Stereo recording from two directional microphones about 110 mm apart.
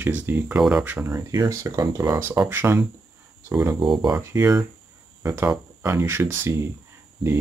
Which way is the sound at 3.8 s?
45° right (ahead or behind).